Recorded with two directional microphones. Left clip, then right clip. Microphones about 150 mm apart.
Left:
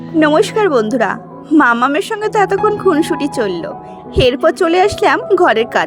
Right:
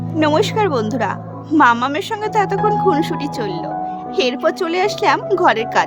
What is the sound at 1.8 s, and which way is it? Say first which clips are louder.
Speech: left 5 dB; 30° left (ahead or behind).